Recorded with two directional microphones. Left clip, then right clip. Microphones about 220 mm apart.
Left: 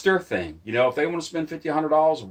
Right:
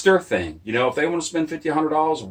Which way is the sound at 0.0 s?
40° left (ahead or behind).